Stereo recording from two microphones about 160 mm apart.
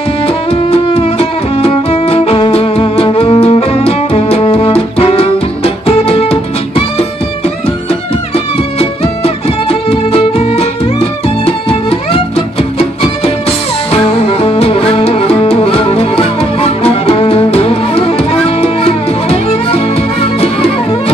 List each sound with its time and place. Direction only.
0.5 s music: 35° left (ahead or behind)
8.7 s music: 35° left (ahead or behind)